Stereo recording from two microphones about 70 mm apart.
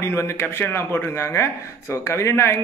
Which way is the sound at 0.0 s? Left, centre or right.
Left.